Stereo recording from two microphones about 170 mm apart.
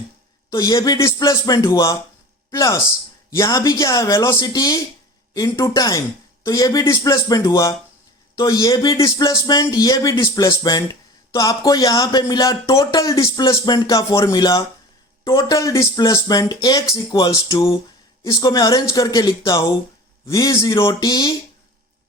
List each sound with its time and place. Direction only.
0.5 s speech: 20° left (ahead or behind)